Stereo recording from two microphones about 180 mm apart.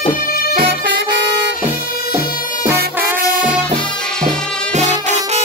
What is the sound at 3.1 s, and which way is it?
Music, 50° right (ahead or behind).